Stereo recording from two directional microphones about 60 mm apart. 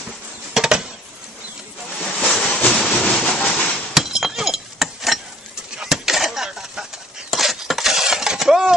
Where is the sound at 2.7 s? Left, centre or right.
Centre.